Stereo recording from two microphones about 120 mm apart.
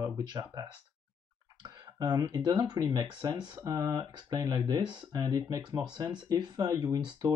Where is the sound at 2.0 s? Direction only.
30° right (ahead or behind).